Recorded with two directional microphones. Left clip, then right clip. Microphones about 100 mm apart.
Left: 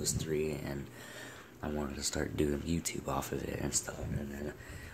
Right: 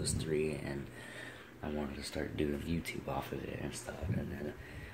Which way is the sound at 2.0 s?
45° left (ahead or behind).